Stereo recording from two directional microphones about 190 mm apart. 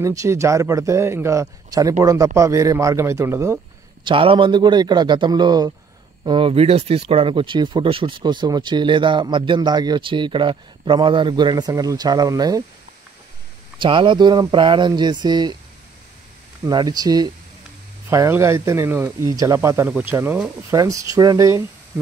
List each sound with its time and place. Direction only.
0.0 s a man's voice: 15° right (ahead or behind)
4.0 s speech: 25° right (ahead or behind)
13.7 s speech: 25° right (ahead or behind)
16.6 s a man's voice: 20° right (ahead or behind)